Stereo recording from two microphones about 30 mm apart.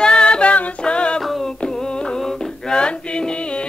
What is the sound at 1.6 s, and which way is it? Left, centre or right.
Music, left.